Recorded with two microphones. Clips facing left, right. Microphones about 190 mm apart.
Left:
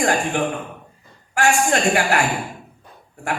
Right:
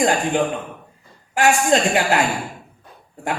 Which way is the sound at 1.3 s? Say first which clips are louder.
Right 2 dB; 20° right (ahead or behind).